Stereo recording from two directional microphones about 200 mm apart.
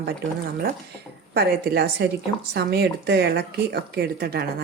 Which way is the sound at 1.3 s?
50° right (ahead or behind).